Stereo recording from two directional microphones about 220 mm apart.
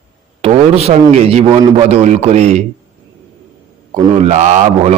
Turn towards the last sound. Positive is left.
turn(degrees=-30)  # may be behind; listen again after turning